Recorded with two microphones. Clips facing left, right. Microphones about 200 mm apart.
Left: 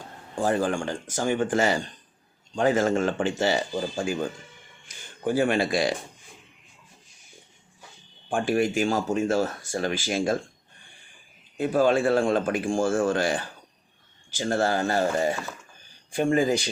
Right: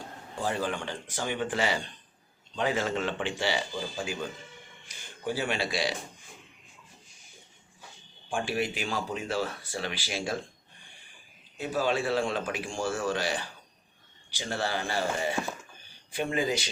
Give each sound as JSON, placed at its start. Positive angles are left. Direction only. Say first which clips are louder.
{"t": 0.3, "sound": "speech", "louder": "left 7 dB", "side_deg": 50}
{"t": 8.3, "sound": "speech", "louder": "left 7 dB", "side_deg": 50}
{"t": 11.5, "sound": "speech", "louder": "left 7 dB", "side_deg": 50}